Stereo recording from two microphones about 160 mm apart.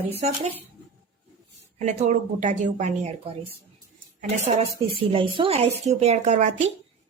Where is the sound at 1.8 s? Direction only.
45° right (ahead or behind).